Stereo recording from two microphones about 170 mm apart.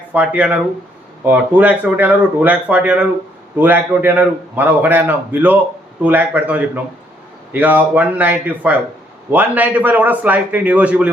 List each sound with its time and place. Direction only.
0.1 s a man's voice: 10° right (ahead or behind)